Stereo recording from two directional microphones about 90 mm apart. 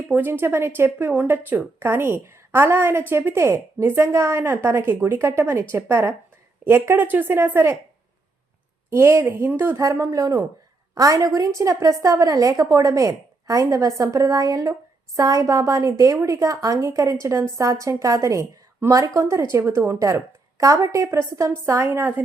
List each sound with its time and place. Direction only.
0.1 s speech: 20° right (ahead or behind)
8.9 s speech: 30° right (ahead or behind)
9.8 s a woman's voice: 35° right (ahead or behind)